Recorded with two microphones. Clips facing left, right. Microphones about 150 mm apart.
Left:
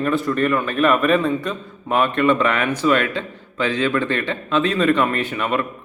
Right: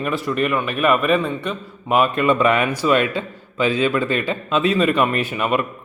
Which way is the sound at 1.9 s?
10° right (ahead or behind).